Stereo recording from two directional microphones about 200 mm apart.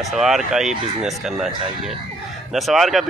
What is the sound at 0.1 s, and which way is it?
Speech, centre (ahead or behind).